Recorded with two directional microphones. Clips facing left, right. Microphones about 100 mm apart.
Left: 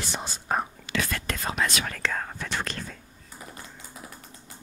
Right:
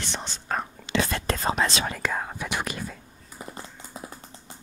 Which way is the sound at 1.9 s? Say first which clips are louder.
Right 2 dB; 10° right (ahead or behind).